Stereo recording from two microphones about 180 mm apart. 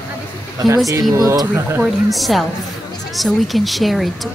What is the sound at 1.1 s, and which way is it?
Speech, 20° right (ahead or behind).